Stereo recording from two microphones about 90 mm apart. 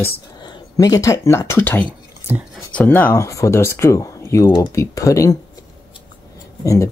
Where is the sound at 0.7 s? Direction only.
40° left (ahead or behind); by 3.2 s 20° left (ahead or behind).